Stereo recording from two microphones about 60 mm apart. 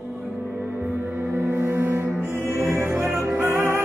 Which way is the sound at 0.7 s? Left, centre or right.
Right.